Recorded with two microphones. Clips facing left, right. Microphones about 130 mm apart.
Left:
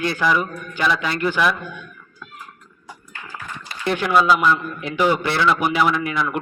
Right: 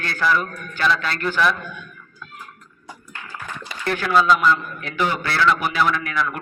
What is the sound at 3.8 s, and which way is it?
A man's voice, 20° left (ahead or behind).